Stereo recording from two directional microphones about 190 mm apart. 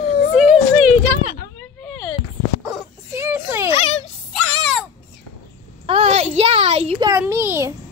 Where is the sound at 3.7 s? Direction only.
30° left (ahead or behind).